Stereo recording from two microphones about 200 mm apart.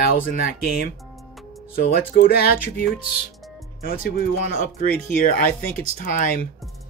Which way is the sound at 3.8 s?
50° left (ahead or behind).